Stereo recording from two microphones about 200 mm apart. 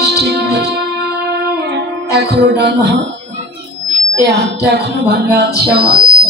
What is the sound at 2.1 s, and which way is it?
Music, 55° right (ahead or behind).